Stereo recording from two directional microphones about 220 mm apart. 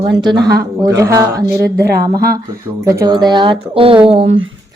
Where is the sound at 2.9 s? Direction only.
15° right (ahead or behind).